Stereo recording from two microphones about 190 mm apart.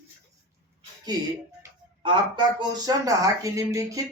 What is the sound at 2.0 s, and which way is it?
Speech, 25° right (ahead or behind).